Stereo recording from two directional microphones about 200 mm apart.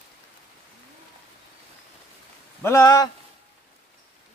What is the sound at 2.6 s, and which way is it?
Speech, 15° left (ahead or behind).